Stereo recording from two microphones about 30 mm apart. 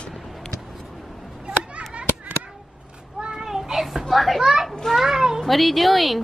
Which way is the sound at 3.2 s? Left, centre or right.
Right.